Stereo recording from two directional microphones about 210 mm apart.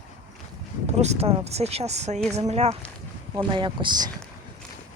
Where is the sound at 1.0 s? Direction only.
30° right (ahead or behind).